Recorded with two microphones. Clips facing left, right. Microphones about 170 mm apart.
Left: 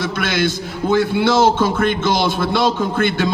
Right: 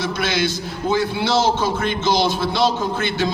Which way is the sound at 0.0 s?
50° left (ahead or behind).